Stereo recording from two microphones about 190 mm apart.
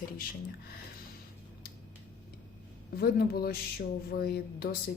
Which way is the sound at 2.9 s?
55° left (ahead or behind).